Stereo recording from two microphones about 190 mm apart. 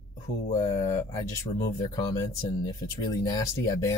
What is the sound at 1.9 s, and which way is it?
Speech, 20° left (ahead or behind).